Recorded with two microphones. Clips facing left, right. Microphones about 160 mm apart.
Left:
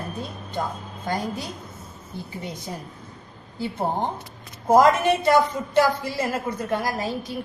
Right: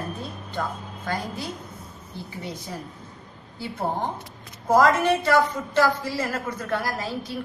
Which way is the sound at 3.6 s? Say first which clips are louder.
Left 2 dB; 20° left (ahead or behind).